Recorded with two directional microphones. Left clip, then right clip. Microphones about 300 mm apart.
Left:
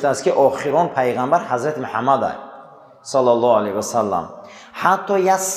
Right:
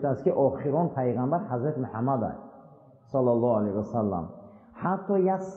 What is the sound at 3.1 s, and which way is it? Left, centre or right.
Speech, left.